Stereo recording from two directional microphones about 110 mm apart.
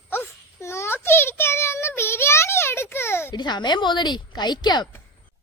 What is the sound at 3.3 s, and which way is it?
A woman's voice, 40° left (ahead or behind).